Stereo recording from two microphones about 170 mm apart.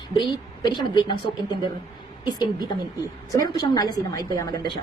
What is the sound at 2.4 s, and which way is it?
A woman's voice, 25° left (ahead or behind).